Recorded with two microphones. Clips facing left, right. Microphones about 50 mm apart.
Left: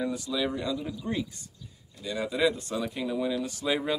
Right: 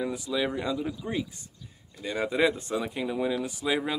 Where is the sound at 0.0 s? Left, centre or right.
Centre.